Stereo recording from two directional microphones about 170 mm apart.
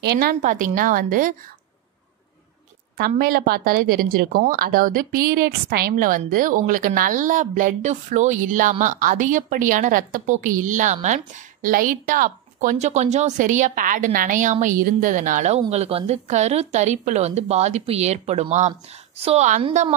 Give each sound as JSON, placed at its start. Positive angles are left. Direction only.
{"t": 0.0, "sound": "a woman's voice", "side_deg": -70}
{"t": 3.0, "sound": "a woman's voice", "side_deg": -60}
{"t": 12.7, "sound": "a woman's voice", "side_deg": -40}